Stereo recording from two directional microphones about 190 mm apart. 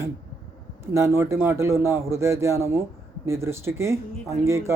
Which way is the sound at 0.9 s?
15° right (ahead or behind).